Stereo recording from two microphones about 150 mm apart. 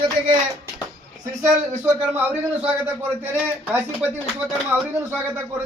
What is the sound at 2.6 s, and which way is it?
Speech, 15° right (ahead or behind).